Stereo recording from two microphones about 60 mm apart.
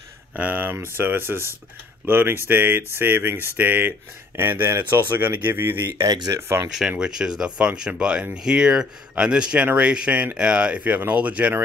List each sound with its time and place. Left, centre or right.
0.4 s speech: right
6.3 s speech: right
7.0 s speech: centre